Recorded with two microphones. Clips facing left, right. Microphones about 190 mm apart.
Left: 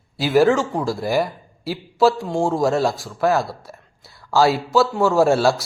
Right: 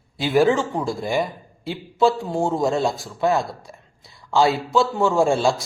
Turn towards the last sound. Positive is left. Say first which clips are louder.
# left 2 dB
turn(degrees=5)  # may be behind; listen again after turning